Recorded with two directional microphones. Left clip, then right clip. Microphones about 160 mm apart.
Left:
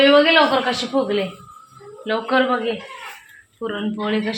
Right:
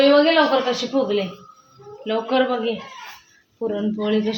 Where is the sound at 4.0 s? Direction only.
15° right (ahead or behind).